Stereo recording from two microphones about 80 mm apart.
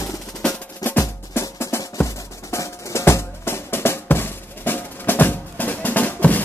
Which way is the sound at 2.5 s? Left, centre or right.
Left.